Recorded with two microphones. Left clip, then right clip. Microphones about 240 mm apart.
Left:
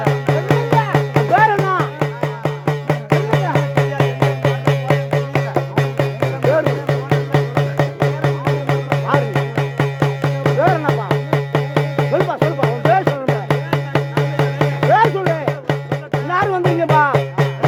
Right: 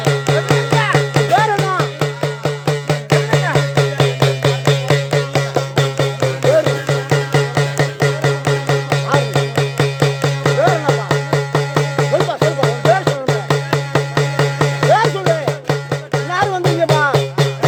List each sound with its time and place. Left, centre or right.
0.1 s music: right
1.5 s music: right
1.8 s music: right
16.3 s music: right
16.6 s music: right